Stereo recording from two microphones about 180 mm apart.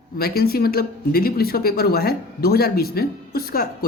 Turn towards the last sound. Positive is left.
turn(degrees=55)  # may be behind; listen again after turning